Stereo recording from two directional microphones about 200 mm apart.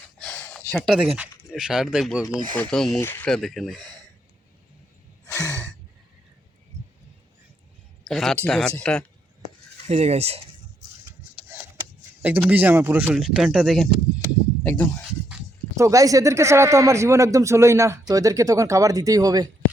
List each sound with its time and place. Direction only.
0.2 s speech: 5° left (ahead or behind)
5.4 s sigh: 15° right (ahead or behind)
6.8 s a sound: 35° right (ahead or behind)
8.0 s speech: centre (ahead or behind)
9.7 s speech: 30° right (ahead or behind)
11.4 s a sound: 10° right (ahead or behind)
12.2 s speech: 10° right (ahead or behind)
14.6 s speech: 10° left (ahead or behind)
15.7 s speech: 15° right (ahead or behind)